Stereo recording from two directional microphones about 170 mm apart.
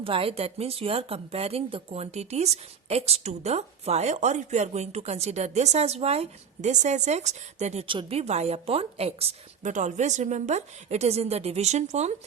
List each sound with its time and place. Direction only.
0.0 s speech: 30° right (ahead or behind)